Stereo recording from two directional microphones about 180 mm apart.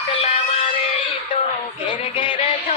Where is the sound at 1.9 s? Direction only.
30° left (ahead or behind).